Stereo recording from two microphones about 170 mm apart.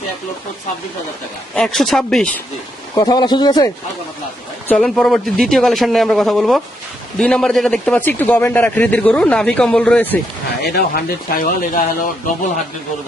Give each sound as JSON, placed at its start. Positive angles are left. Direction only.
{"t": 1.5, "sound": "a man's voice", "side_deg": 0}
{"t": 2.9, "sound": "speech", "side_deg": 25}
{"t": 4.7, "sound": "a man's voice", "side_deg": 0}
{"t": 10.6, "sound": "speech", "side_deg": 60}